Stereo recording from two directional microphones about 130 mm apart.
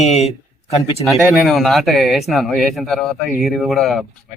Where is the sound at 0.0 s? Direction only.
55° left (ahead or behind).